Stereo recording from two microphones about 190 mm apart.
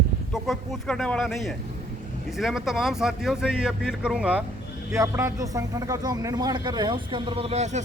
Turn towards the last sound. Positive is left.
turn(degrees=-35)  # may be behind; listen again after turning